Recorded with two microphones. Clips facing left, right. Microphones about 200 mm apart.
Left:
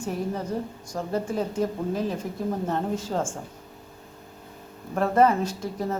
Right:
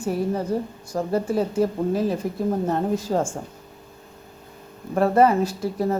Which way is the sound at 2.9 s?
40° right (ahead or behind).